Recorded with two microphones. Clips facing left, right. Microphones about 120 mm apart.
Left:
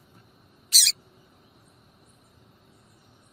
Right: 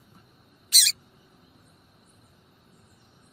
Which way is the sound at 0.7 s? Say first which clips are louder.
Right 1 dB; 30° left (ahead or behind).